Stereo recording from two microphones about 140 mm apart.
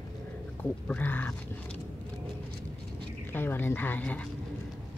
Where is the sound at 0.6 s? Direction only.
10° left (ahead or behind).